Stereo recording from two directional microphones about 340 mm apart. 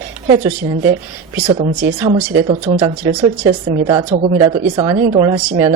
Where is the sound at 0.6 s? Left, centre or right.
Right.